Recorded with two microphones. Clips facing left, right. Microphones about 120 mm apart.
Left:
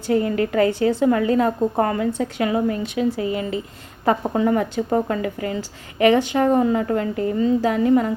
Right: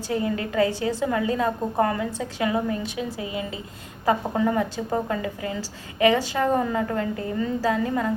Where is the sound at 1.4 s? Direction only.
25° left (ahead or behind).